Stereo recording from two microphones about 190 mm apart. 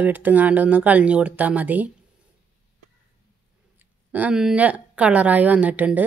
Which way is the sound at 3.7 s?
10° right (ahead or behind).